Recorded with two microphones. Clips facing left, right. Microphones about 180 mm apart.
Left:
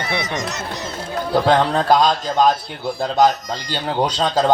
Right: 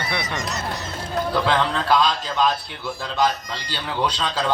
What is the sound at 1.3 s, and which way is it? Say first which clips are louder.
Speech: left 7 dB; 45° left (ahead or behind).